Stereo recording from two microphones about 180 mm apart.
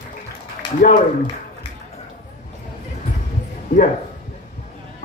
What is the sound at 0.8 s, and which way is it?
Speech, 50° left (ahead or behind).